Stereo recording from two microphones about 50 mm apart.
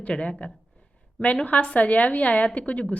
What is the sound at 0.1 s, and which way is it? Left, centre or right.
A woman's voice, left.